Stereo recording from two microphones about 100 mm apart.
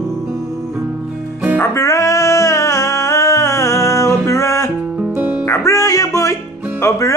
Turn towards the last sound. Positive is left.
turn(degrees=25)  # may be behind; listen again after turning